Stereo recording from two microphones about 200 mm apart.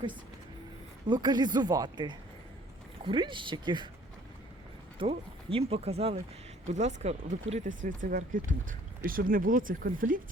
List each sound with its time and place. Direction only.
1.0 s speech: 20° right (ahead or behind)
4.9 s speech: 30° right (ahead or behind); by 10.2 s 45° right (ahead or behind)